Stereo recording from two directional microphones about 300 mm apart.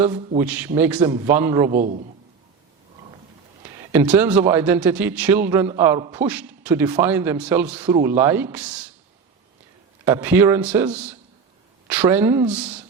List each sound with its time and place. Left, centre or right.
0.3 s a man's voice: centre
1.7 s a man's voice: right
3.8 s a man's voice: centre
10.0 s a man's voice: centre